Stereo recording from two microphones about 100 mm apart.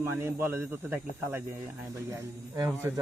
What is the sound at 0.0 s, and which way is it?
Speech, 25° right (ahead or behind).